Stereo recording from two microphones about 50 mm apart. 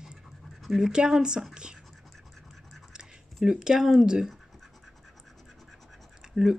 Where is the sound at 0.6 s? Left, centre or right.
Centre.